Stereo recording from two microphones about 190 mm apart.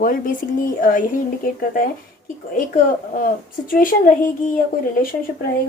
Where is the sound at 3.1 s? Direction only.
50° left (ahead or behind).